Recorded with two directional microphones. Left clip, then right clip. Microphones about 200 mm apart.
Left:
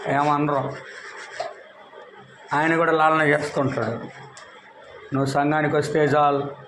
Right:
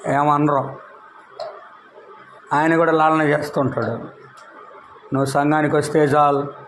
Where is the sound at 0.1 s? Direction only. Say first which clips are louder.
Right 4 dB; 35° right (ahead or behind).